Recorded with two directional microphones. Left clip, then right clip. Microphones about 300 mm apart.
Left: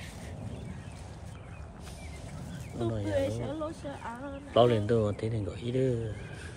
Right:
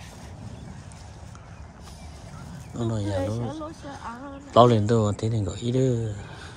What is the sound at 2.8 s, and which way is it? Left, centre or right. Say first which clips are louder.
Speech: right 3 dB; centre.